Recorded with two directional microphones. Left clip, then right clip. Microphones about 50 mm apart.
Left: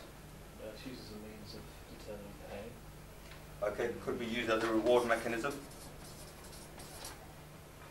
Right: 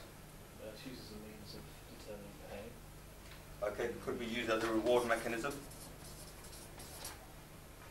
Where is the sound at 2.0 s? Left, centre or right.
Left.